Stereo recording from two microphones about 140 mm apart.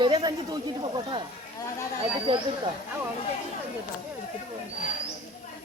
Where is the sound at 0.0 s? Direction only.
35° right (ahead or behind).